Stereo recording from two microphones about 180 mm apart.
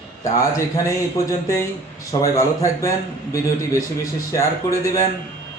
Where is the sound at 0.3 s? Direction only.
20° left (ahead or behind).